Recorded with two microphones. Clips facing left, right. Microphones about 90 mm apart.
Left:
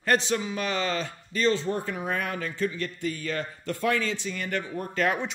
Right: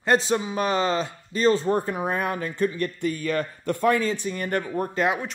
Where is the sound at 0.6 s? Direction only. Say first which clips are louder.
Right 5 dB; 35° right (ahead or behind).